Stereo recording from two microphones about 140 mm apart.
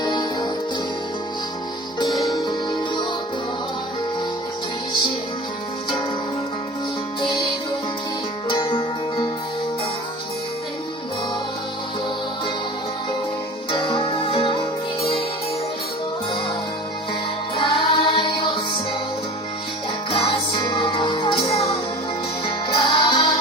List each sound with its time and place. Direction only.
0.0 s music: 30° left (ahead or behind)
8.4 s music: 35° left (ahead or behind)
13.7 s music: 35° left (ahead or behind)
17.5 s music: 35° left (ahead or behind)
20.1 s music: 40° left (ahead or behind)
22.7 s music: 35° left (ahead or behind)